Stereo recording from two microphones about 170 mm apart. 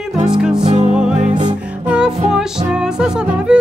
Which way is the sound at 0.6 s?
40° right (ahead or behind).